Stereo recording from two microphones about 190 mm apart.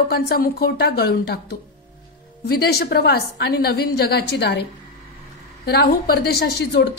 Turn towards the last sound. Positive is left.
turn(degrees=60)  # may be behind; listen again after turning